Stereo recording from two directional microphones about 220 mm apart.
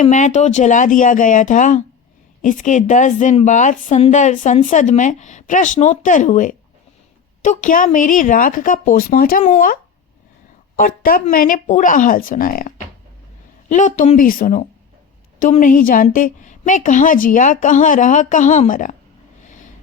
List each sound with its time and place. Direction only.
0.0 s a woman's voice: 35° left (ahead or behind)
10.8 s a woman's voice: 40° left (ahead or behind)